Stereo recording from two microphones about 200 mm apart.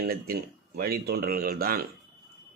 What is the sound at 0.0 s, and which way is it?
Speech, 50° right (ahead or behind).